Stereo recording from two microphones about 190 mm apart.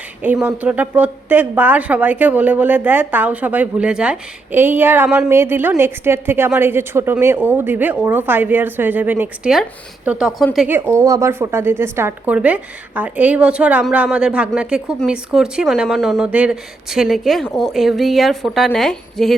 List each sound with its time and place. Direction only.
0.2 s speech: 10° right (ahead or behind)